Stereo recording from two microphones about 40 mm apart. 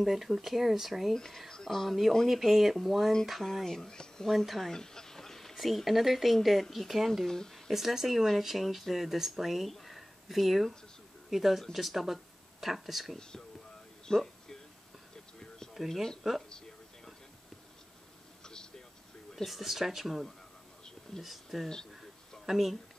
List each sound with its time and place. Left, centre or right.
0.0 s speech: centre
1.1 s speech: centre
1.5 s a sound: centre
2.2 s speech: centre
3.6 s speech: centre
4.3 s speech: centre
4.7 s a sound: centre
5.5 s speech: centre
7.2 s a sound: centre
7.7 s speech: centre
14.0 s music: centre
15.9 s speech: centre
18.4 s vehicle: centre
19.3 s speech: centre